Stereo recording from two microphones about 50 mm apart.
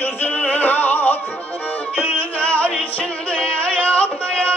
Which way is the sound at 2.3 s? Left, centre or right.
Left.